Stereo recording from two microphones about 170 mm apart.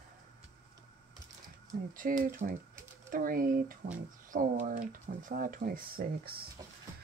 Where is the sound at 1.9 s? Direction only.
50° right (ahead or behind).